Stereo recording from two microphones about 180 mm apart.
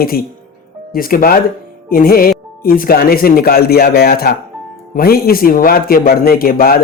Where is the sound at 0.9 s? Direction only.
55° left (ahead or behind).